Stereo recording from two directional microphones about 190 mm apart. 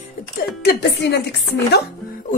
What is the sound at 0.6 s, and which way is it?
Speech, 60° left (ahead or behind).